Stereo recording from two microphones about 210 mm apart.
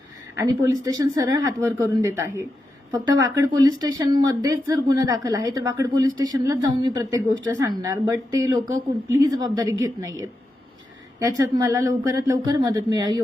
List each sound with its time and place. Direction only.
0.3 s a woman's voice: 15° right (ahead or behind)